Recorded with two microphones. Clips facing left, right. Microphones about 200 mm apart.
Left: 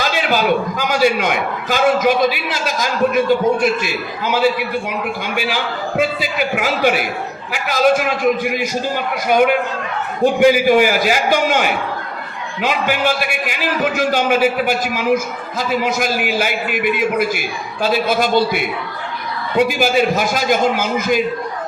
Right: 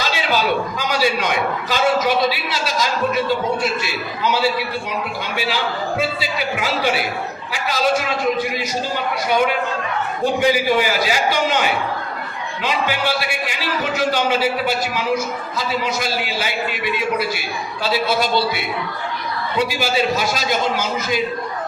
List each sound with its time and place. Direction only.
0.3 s a man's voice: 50° left (ahead or behind)
6.0 s a man's voice: 50° left (ahead or behind)